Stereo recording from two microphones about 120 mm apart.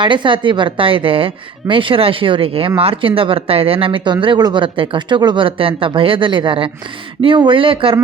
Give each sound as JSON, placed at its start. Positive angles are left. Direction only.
{"t": 0.0, "sound": "a woman's voice", "side_deg": -40}